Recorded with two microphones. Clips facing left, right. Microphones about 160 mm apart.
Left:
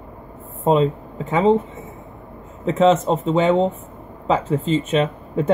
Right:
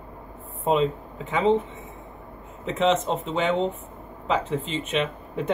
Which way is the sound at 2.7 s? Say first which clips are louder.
Left 6 dB; 40° left (ahead or behind).